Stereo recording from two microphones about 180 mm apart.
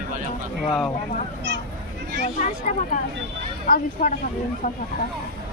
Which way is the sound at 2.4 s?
40° left (ahead or behind).